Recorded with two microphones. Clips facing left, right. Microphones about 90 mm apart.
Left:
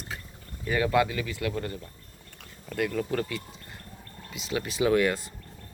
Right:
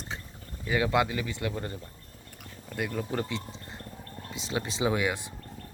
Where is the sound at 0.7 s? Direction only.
15° right (ahead or behind).